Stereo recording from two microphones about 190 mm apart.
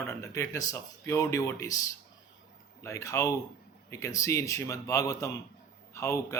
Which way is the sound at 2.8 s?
15° left (ahead or behind).